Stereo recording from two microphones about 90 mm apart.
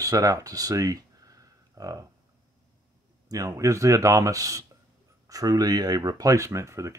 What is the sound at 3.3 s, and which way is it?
Speech, 40° right (ahead or behind).